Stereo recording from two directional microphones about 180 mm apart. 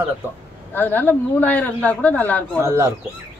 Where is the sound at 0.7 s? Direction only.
10° left (ahead or behind).